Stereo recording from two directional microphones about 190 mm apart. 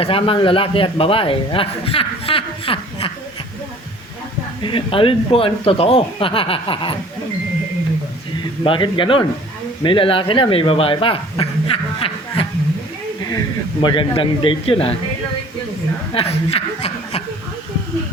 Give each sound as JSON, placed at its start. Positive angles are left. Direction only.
{"t": 0.0, "sound": "a man's voice", "side_deg": 30}
{"t": 4.6, "sound": "speech", "side_deg": 25}
{"t": 8.6, "sound": "speech", "side_deg": 25}
{"t": 13.8, "sound": "speech", "side_deg": 25}
{"t": 16.1, "sound": "speech", "side_deg": 30}